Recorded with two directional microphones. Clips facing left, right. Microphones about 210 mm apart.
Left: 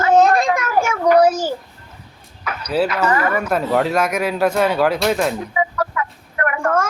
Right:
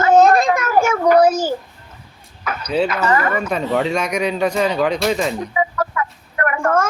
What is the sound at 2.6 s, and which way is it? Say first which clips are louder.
Speech: even; 5° left (ahead or behind).